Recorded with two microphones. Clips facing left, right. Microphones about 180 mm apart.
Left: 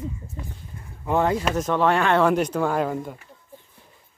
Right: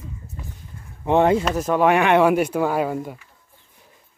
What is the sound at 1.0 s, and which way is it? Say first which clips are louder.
Speech: right 5 dB; 25° right (ahead or behind).